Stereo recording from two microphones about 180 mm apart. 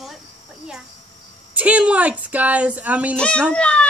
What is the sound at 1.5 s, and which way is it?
Speech, 5° right (ahead or behind).